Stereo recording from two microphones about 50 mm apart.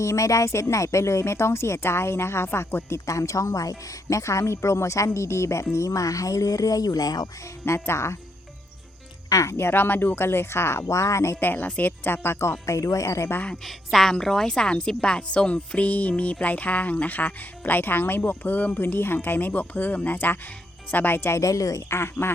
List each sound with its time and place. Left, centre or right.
0.0 s speech: left
3.1 s speech: left
7.6 s speech: left
9.5 s speech: left
11.3 s speech: left
13.7 s a woman's voice: centre; by 18.8 s left
18.8 s speech: left
21.3 s speech: left